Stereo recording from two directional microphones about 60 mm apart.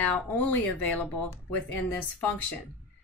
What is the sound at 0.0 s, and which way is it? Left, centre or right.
A woman's voice, left.